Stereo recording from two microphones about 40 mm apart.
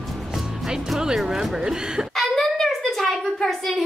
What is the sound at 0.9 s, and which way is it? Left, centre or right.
Speech, centre.